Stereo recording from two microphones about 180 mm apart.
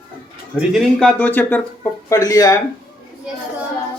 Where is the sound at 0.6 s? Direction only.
Centre (ahead or behind); by 2.5 s 20° left (ahead or behind).